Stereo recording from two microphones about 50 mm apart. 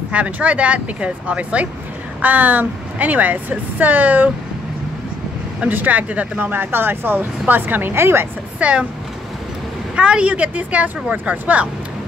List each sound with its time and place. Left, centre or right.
0.1 s speech: right
5.7 s speech: right
6.5 s speech: right
8.5 s speech: right
9.9 s speech: right